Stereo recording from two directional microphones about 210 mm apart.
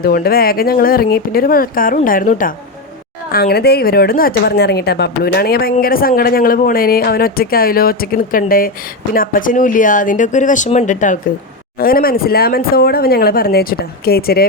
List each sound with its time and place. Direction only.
0.0 s speech: 45° left (ahead or behind)